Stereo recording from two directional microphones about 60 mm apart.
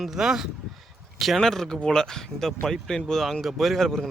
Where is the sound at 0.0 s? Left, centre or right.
Centre.